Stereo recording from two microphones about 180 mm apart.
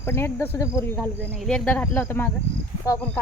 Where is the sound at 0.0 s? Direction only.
15° left (ahead or behind).